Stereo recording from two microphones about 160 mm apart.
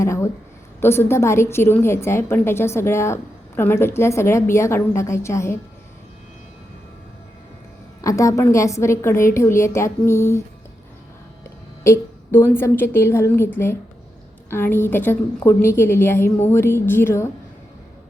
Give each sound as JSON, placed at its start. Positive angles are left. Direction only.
{"t": 0.0, "sound": "a sound", "side_deg": 20}
{"t": 0.8, "sound": "a woman's voice", "side_deg": 15}
{"t": 8.0, "sound": "a woman's voice", "side_deg": 20}
{"t": 11.8, "sound": "a woman's voice", "side_deg": 15}